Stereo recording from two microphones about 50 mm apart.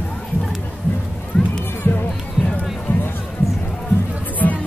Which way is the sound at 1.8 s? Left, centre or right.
Left.